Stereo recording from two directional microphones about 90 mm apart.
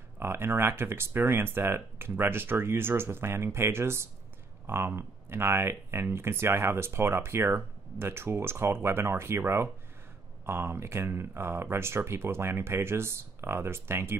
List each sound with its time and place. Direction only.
0.2 s speech: 25° right (ahead or behind)